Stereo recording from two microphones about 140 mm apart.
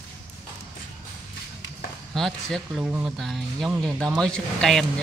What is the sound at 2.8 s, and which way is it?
Speech, 10° right (ahead or behind).